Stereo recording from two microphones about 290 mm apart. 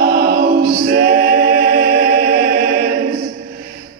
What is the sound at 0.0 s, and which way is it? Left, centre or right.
A capella, right.